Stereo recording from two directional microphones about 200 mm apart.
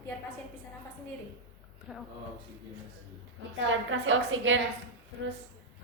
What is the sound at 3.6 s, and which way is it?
Speech, 70° right (ahead or behind).